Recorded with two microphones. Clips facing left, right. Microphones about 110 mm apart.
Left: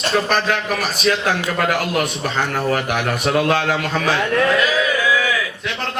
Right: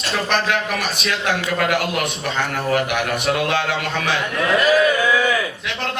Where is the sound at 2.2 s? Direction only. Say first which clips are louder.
Left 2 dB; 40° left (ahead or behind).